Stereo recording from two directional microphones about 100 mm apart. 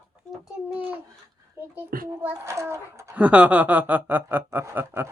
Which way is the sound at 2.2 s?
25° right (ahead or behind).